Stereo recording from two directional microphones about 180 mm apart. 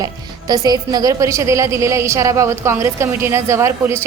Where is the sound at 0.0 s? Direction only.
20° right (ahead or behind).